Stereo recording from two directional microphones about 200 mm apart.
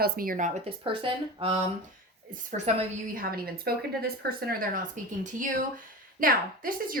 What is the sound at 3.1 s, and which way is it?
A woman's voice, 45° right (ahead or behind).